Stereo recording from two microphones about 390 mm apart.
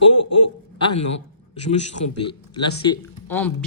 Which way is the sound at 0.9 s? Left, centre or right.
Left.